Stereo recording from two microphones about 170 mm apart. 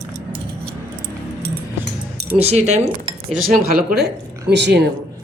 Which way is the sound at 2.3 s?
40° right (ahead or behind).